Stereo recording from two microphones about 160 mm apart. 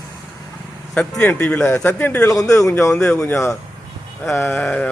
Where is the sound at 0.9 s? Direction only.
10° left (ahead or behind).